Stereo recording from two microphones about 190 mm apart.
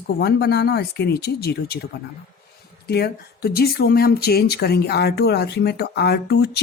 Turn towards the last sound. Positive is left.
turn(degrees=60)  # may be behind; listen again after turning